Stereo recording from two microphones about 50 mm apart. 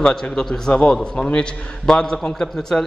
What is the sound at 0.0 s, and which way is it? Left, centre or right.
A man's voice, centre.